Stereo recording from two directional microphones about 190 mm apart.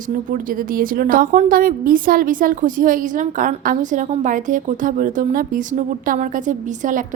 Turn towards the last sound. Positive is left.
turn(degrees=-45)  # may be behind; listen again after turning